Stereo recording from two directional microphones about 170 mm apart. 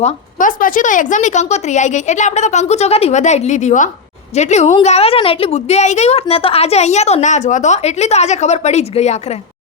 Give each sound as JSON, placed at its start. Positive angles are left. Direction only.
{"t": 0.0, "sound": "a woman's voice", "side_deg": 50}